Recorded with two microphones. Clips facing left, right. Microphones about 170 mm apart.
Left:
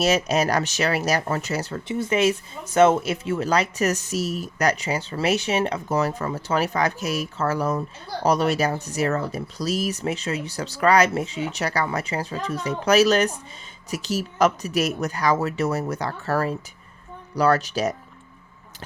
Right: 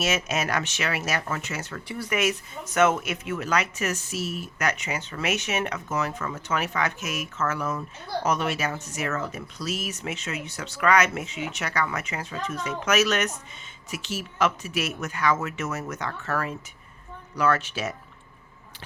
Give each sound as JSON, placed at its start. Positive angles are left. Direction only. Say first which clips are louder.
{"t": 0.0, "sound": "speech", "louder": "left 6 dB", "side_deg": 35}
{"t": 1.9, "sound": "speech", "louder": "left 6 dB", "side_deg": 25}